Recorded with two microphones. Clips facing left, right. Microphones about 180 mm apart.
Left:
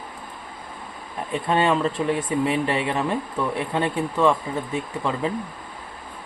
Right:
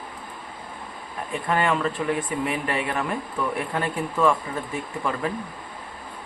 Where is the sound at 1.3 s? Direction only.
25° left (ahead or behind).